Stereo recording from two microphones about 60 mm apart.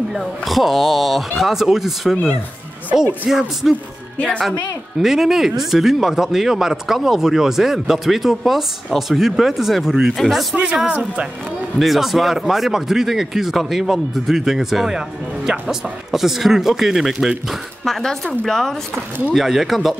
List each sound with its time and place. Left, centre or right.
0.1 s speech: centre
3.3 s speech: centre
10.5 s speech: centre
11.8 s speech: centre
17.8 s speech: centre